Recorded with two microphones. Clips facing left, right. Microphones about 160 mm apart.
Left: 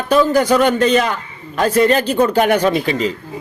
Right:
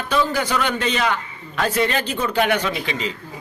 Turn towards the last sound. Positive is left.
turn(degrees=40)  # may be behind; listen again after turning